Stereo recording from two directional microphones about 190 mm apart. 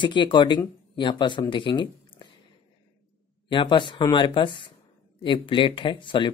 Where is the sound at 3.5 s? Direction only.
25° left (ahead or behind).